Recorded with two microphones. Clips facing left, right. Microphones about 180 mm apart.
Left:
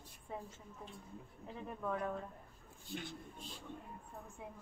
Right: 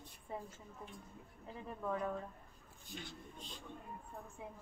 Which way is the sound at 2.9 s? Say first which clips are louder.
Left 5 dB; 15° right (ahead or behind).